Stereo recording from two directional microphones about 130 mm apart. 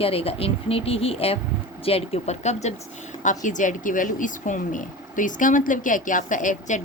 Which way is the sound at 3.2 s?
75° left (ahead or behind).